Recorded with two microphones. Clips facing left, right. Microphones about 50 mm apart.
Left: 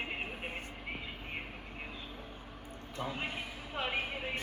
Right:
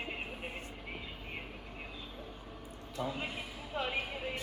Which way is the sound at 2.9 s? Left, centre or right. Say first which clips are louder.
Even; left.